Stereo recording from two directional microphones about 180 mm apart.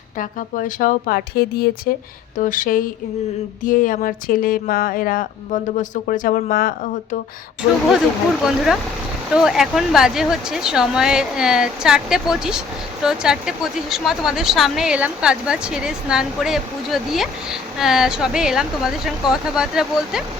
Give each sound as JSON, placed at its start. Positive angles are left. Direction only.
{"t": 0.2, "sound": "speech", "side_deg": 50}
{"t": 8.4, "sound": "speech", "side_deg": 0}